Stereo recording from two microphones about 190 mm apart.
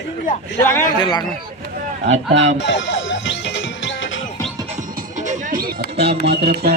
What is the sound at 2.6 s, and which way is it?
Music, 70° left (ahead or behind).